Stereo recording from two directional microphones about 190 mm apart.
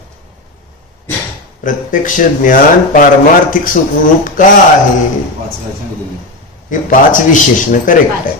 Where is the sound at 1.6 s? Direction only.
45° left (ahead or behind).